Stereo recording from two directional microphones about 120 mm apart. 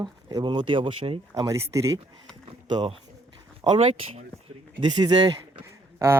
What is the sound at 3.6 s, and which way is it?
Speech, 50° right (ahead or behind).